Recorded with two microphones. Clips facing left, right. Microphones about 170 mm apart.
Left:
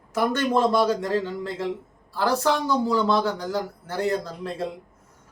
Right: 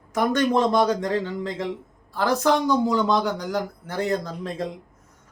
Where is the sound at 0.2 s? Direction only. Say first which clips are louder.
Right 1 dB; 15° right (ahead or behind).